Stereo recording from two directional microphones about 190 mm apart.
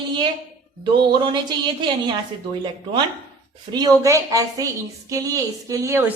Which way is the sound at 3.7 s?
20° right (ahead or behind).